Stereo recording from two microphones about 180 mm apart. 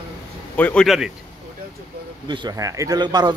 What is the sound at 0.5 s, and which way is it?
Speech, 5° left (ahead or behind).